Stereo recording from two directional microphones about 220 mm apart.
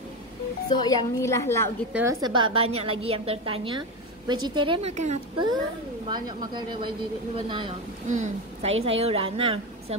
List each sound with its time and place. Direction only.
0.7 s a woman's voice: 15° left (ahead or behind)
2.0 s a woman's voice: 15° right (ahead or behind)
8.1 s a woman's voice: 35° right (ahead or behind)